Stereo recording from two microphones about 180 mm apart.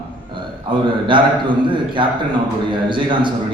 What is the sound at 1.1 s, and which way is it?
Speech, 25° right (ahead or behind).